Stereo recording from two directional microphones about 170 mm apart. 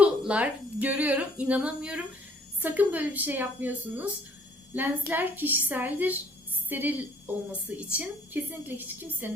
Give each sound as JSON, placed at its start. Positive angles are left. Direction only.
{"t": 0.0, "sound": "speech", "side_deg": -5}